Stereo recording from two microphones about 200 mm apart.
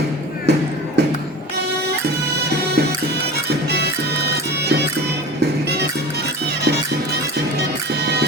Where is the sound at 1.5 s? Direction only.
55° right (ahead or behind).